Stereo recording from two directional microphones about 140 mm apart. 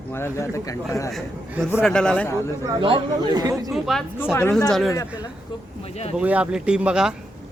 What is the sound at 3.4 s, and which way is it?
Speech, 25° right (ahead or behind).